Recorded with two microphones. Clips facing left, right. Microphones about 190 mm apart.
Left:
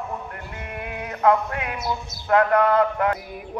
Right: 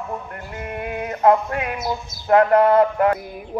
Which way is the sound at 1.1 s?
30° right (ahead or behind).